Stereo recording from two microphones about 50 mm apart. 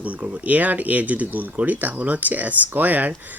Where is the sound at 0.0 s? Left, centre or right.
Right.